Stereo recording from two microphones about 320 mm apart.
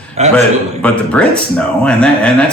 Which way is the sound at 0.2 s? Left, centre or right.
Centre.